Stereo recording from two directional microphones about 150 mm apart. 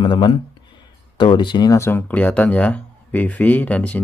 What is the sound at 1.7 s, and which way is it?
Speech, 15° left (ahead or behind).